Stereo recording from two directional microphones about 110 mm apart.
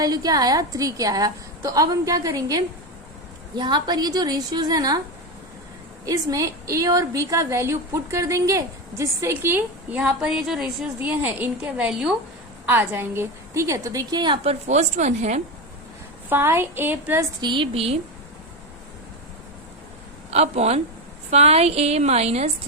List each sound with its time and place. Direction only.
0.0 s a woman's voice: 35° right (ahead or behind)
6.1 s a woman's voice: 30° right (ahead or behind); by 11.1 s 5° right (ahead or behind)
11.1 s a woman's voice: 15° right (ahead or behind); by 14.3 s 40° right (ahead or behind)
14.4 s a woman's voice: 90° right
16.3 s a woman's voice: 20° right (ahead or behind)
17.4 s a woman's voice: 50° right (ahead or behind)
20.3 s a woman's voice: 75° right (ahead or behind)